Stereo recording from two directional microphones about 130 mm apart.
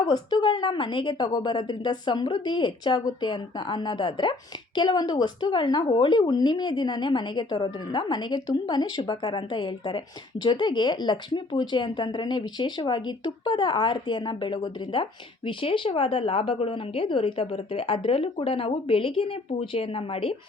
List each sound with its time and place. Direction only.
0.0 s a woman's voice: 35° left (ahead or behind)